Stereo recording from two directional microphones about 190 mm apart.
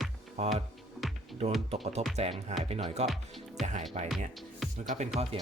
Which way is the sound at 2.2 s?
35° right (ahead or behind).